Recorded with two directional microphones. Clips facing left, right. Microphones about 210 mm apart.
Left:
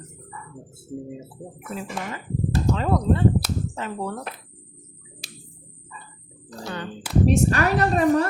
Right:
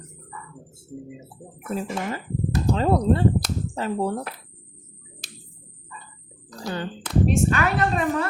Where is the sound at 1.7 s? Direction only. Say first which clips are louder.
Right 4 dB; 40° right (ahead or behind).